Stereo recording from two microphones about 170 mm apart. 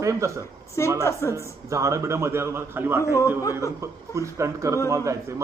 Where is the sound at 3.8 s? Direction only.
15° right (ahead or behind).